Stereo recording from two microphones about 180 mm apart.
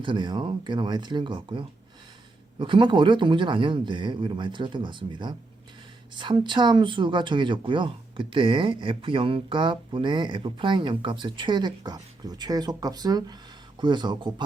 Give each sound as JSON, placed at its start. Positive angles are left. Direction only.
{"t": 0.0, "sound": "speech", "side_deg": -25}